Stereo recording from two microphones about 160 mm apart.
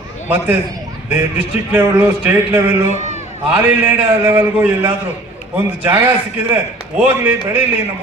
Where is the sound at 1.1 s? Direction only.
10° right (ahead or behind).